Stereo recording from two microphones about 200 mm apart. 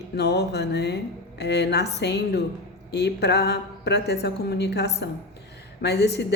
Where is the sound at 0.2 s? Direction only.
55° left (ahead or behind).